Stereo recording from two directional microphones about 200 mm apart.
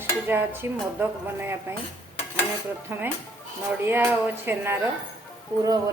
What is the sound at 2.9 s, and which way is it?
A woman's voice, 10° right (ahead or behind).